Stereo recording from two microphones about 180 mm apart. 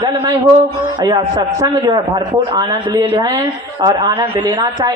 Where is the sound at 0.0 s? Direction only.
25° right (ahead or behind).